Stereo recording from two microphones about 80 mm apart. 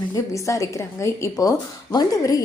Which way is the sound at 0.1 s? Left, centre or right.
Left.